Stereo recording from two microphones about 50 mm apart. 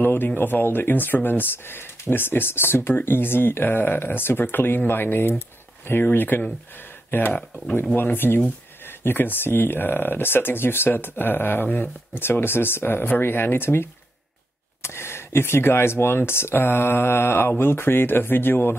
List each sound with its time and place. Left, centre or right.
0.0 s speech: left
12.2 s speech: left